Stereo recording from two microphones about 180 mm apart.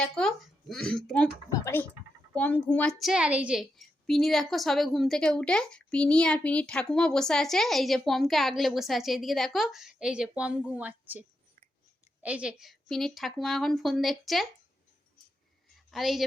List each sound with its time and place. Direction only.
0.0 s speech: 5° left (ahead or behind)
1.5 s a woman's voice: 15° left (ahead or behind); by 14.4 s centre (ahead or behind)
15.9 s a woman's voice: centre (ahead or behind)